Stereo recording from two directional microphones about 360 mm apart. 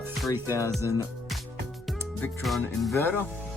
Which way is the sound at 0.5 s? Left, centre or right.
Centre.